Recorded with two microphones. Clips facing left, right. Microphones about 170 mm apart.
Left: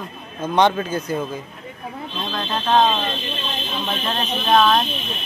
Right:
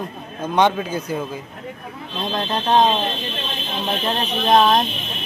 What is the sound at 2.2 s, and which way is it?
Speech, 35° right (ahead or behind).